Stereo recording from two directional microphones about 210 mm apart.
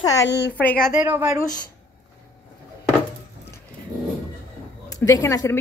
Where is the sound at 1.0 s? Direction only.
10° right (ahead or behind).